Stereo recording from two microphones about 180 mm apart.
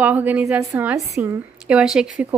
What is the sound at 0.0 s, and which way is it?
A woman's voice, 10° right (ahead or behind).